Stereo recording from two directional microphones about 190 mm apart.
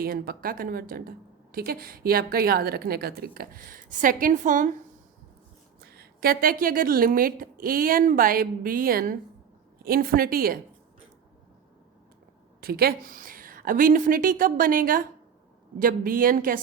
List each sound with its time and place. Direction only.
0.0 s a woman's voice: 50° right (ahead or behind)
5.8 s a woman's voice: 55° right (ahead or behind)
12.5 s a woman's voice: 55° right (ahead or behind)